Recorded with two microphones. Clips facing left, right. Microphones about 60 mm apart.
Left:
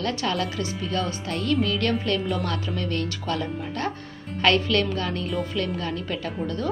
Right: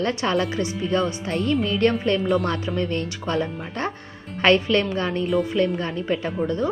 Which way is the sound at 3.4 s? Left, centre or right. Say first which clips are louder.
Left 1 dB; centre.